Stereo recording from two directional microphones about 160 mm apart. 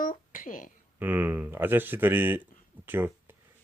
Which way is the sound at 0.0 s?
55° left (ahead or behind).